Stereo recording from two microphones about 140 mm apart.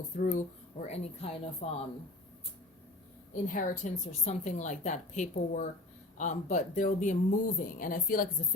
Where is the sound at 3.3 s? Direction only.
70° left (ahead or behind).